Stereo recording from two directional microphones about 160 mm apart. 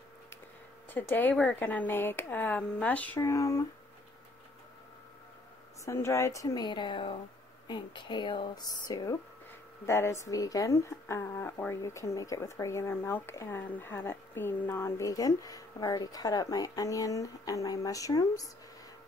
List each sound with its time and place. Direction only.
0.8 s speech: 10° left (ahead or behind)
3.2 s speech: 20° left (ahead or behind)
5.9 s speech: 20° left (ahead or behind)